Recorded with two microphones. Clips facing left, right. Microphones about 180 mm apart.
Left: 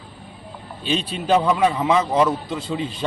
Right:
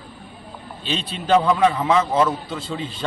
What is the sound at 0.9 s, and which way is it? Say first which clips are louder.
Speech: even; 10° left (ahead or behind).